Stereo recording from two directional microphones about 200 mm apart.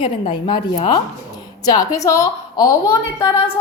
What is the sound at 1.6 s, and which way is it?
A woman's voice, 20° left (ahead or behind).